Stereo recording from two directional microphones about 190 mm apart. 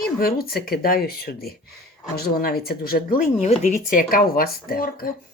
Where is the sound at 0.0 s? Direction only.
55° left (ahead or behind).